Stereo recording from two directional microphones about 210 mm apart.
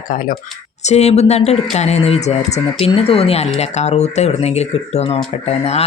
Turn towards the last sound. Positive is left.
turn(degrees=30)  # may be behind; listen again after turning